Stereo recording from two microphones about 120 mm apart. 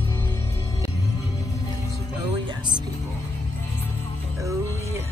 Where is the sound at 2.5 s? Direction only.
40° right (ahead or behind).